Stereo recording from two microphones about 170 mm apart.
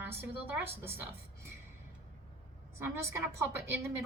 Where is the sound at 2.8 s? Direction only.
15° right (ahead or behind).